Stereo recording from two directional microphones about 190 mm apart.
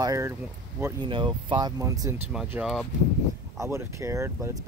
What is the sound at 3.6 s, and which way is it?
Speech, 15° right (ahead or behind).